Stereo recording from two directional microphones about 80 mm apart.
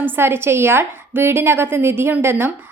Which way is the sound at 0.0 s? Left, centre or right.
Right.